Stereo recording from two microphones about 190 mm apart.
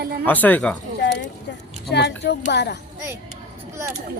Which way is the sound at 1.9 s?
65° left (ahead or behind).